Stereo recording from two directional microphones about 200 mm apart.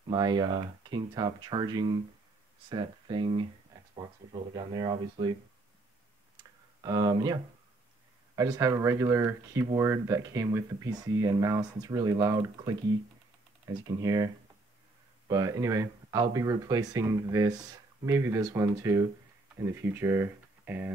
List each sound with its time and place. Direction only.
0.1 s speech: 20° right (ahead or behind)
6.3 s clicking: 20° right (ahead or behind)
8.4 s speech: 15° right (ahead or behind)